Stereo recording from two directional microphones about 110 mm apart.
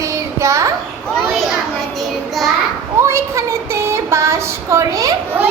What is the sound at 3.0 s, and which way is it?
Child singing, 25° right (ahead or behind).